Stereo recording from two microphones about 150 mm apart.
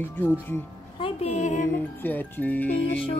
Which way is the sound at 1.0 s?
40° left (ahead or behind).